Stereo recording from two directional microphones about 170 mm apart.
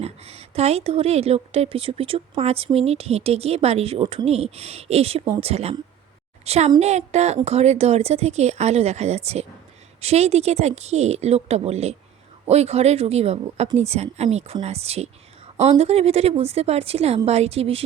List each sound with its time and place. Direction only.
0.0 s a woman's voice: 35° right (ahead or behind)